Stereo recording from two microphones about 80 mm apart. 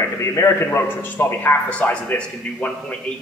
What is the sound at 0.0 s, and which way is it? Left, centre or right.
A man's voice, left.